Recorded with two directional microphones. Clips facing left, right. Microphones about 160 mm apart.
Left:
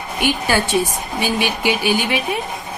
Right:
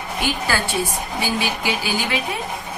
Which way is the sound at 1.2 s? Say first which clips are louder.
Left 4 dB; 20° left (ahead or behind).